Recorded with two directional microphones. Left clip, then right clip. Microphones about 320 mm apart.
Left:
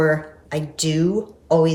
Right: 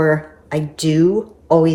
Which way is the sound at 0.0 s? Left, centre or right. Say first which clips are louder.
Right 3 dB; centre.